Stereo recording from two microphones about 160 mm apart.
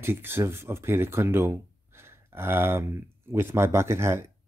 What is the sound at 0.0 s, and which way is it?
Speech, 15° right (ahead or behind).